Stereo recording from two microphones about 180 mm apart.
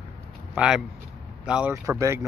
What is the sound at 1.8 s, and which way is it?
Speech, 15° right (ahead or behind).